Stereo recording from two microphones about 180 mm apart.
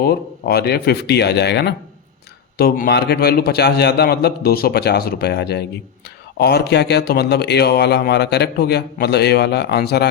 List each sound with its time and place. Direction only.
0.0 s a man's voice: 60° left (ahead or behind)
2.6 s a man's voice: 60° left (ahead or behind)